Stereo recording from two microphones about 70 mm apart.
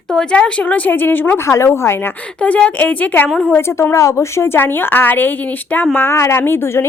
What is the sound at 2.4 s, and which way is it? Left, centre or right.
Speech, left.